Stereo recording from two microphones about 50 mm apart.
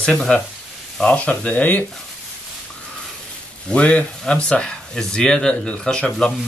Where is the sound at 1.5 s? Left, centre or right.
Left.